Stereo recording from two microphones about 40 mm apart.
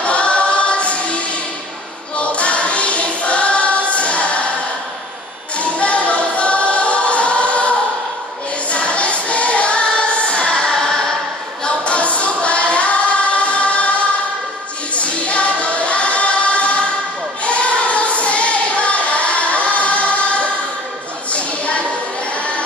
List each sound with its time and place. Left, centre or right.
0.0 s choir: left
5.6 s music: left
8.6 s music: left; by 11.1 s centre
11.6 s singing: left
15.0 s music: left
17.4 s child singing: left
21.3 s a sound: left